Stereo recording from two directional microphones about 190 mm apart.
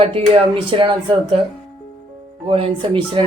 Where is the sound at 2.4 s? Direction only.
30° right (ahead or behind).